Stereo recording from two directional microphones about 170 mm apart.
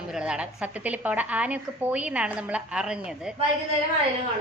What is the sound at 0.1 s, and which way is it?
A woman's voice, 5° right (ahead or behind).